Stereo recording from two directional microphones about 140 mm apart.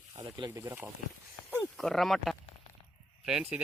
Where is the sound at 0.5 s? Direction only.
15° right (ahead or behind).